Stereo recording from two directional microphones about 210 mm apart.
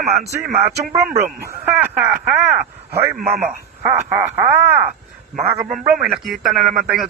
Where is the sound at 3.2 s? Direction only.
30° right (ahead or behind).